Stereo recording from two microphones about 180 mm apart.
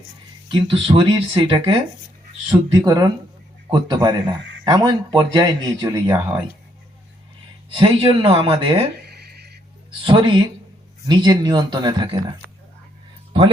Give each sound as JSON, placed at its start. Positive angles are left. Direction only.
{"t": 0.4, "sound": "speech", "side_deg": -25}
{"t": 7.8, "sound": "speech", "side_deg": -25}
{"t": 9.0, "sound": "a sound", "side_deg": -65}
{"t": 10.0, "sound": "speech", "side_deg": -25}